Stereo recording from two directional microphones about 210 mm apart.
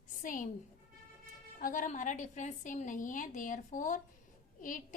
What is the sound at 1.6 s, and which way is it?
A woman's voice, 40° left (ahead or behind).